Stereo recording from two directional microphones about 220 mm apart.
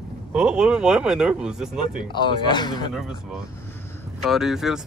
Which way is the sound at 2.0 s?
20° left (ahead or behind).